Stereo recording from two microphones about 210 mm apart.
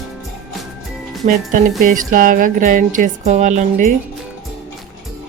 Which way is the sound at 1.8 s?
40° right (ahead or behind).